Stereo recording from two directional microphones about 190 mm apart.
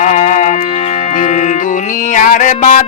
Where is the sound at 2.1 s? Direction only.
45° left (ahead or behind).